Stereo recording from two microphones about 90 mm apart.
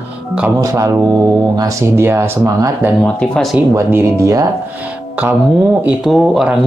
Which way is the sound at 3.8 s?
30° right (ahead or behind).